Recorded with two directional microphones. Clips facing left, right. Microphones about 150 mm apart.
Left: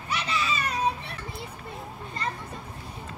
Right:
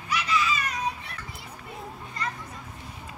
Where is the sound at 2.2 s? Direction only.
30° left (ahead or behind).